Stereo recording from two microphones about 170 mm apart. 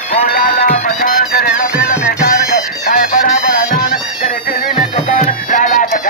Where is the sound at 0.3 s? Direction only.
60° left (ahead or behind).